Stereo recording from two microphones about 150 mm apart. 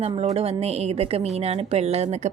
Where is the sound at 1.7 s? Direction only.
45° right (ahead or behind).